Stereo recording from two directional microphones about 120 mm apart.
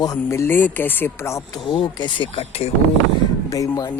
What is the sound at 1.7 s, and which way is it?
Speech, 45° left (ahead or behind).